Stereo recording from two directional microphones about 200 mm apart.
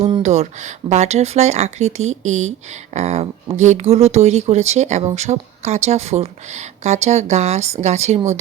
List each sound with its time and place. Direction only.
0.2 s speech: 35° right (ahead or behind)